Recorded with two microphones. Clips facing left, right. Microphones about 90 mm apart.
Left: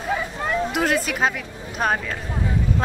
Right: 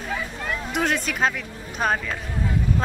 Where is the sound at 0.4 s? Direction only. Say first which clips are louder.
Left 6 dB; 25° left (ahead or behind).